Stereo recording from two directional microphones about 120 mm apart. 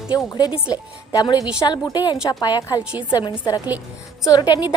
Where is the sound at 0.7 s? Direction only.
35° left (ahead or behind).